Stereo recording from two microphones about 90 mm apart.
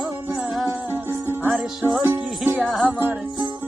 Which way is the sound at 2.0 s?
25° right (ahead or behind).